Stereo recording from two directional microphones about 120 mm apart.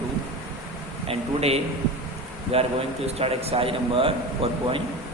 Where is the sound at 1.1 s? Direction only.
55° right (ahead or behind).